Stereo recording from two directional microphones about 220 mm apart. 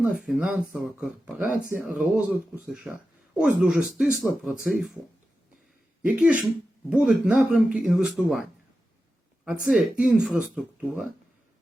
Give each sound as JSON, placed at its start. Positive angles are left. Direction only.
{"t": 0.0, "sound": "speech", "side_deg": -5}
{"t": 6.1, "sound": "speech", "side_deg": -5}
{"t": 9.6, "sound": "speech", "side_deg": 0}